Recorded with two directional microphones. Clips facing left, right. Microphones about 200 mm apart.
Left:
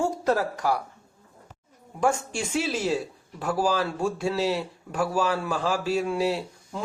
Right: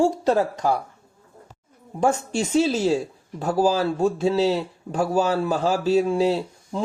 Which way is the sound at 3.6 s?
25° right (ahead or behind).